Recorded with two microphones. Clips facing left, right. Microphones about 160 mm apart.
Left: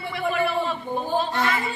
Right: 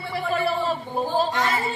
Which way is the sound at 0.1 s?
35° right (ahead or behind).